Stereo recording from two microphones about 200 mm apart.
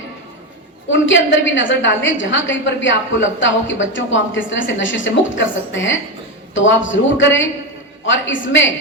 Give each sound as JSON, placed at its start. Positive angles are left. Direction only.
{"t": 0.9, "sound": "a woman's voice", "side_deg": 70}